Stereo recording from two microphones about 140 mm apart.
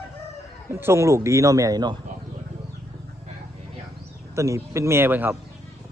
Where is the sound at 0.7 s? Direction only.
20° right (ahead or behind).